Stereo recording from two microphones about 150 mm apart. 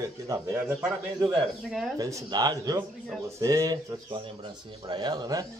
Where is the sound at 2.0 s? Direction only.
25° right (ahead or behind).